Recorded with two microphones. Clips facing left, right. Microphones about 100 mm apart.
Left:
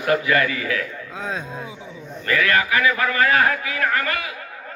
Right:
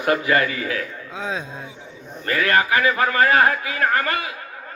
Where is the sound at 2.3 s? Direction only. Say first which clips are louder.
Right 1 dB; 35° right (ahead or behind).